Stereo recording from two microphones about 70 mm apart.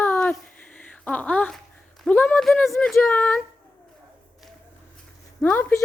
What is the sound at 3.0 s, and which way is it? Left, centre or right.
Speech, left.